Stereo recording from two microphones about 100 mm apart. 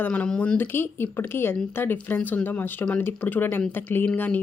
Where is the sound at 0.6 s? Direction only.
20° left (ahead or behind).